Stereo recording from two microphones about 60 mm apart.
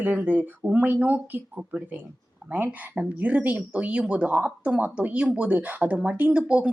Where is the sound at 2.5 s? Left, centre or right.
Right.